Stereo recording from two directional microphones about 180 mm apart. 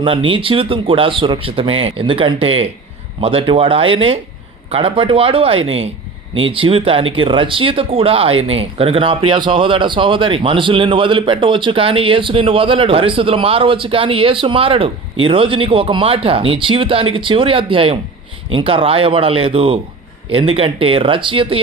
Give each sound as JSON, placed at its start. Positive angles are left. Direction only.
{"t": 0.0, "sound": "speech", "side_deg": -30}